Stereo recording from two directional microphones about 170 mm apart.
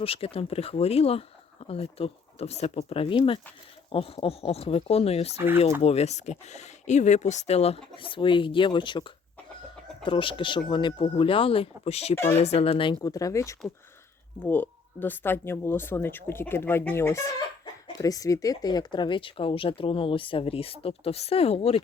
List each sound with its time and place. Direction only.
0.0 s speech: 35° left (ahead or behind)
12.1 s speech: 15° left (ahead or behind)
12.4 s speech: 35° left (ahead or behind)